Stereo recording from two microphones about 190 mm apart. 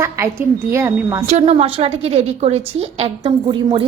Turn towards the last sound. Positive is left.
turn(degrees=-25)  # may be behind; listen again after turning